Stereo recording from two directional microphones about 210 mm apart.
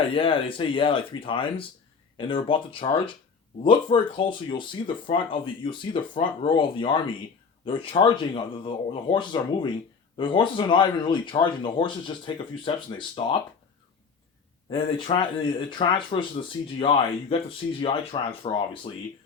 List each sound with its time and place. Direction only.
0.1 s speech: 25° left (ahead or behind)
14.7 s speech: 25° left (ahead or behind)